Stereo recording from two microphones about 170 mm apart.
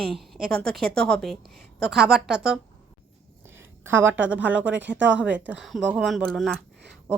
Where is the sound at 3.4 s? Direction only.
15° right (ahead or behind).